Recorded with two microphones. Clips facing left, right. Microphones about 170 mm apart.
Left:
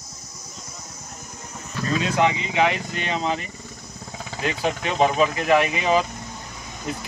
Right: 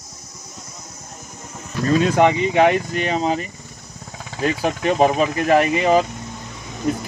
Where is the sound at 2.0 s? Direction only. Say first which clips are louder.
Right 5 dB; 50° right (ahead or behind).